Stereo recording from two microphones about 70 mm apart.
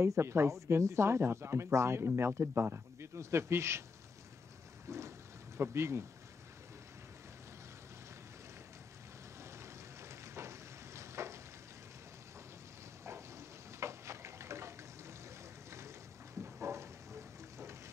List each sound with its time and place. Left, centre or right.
0.0 s speech: right
4.8 s boat: right
5.6 s speech: right
9.4 s frying: right
13.7 s water: right
16.5 s a sound: right